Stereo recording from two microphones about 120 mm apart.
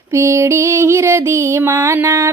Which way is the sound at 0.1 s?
25° right (ahead or behind).